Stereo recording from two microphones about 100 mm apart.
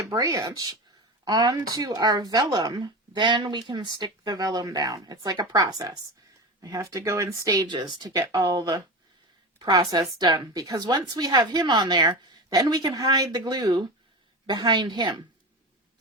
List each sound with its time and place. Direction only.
0.0 s speech: 35° right (ahead or behind)
7.7 s a woman's voice: 50° right (ahead or behind)
8.3 s a woman's voice: 40° right (ahead or behind)